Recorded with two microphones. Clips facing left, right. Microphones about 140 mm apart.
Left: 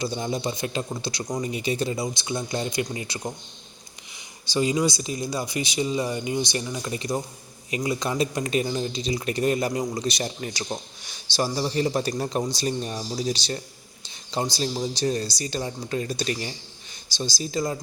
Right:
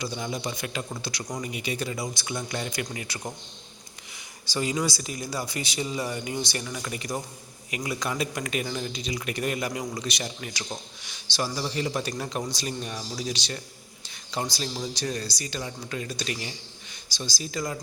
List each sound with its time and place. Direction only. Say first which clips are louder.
0.0 s speech: left 4 dB; 30° left (ahead or behind)
4.4 s speech: left 5 dB; 20° left (ahead or behind)